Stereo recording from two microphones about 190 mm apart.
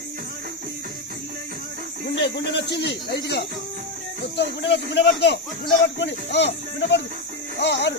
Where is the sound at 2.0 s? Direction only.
60° left (ahead or behind).